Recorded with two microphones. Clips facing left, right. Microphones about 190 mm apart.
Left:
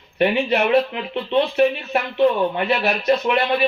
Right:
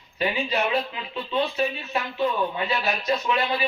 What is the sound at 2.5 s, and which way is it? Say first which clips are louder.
Speech: left 6 dB; 65° left (ahead or behind).